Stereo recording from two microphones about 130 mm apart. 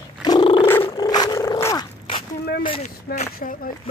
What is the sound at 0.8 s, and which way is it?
Dog, 30° left (ahead or behind).